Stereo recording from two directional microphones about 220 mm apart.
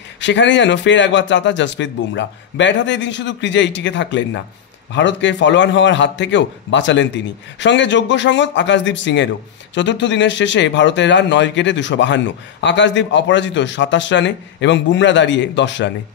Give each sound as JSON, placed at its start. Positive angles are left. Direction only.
{"t": 0.2, "sound": "speech", "side_deg": 55}